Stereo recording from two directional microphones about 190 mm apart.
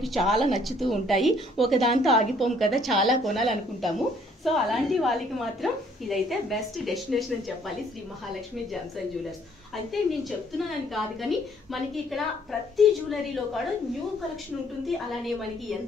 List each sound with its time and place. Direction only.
0.0 s a woman's voice: centre (ahead or behind)
10.9 s a woman's voice: centre (ahead or behind)